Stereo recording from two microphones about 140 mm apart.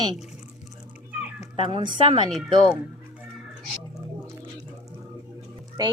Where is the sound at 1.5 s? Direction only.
40° right (ahead or behind).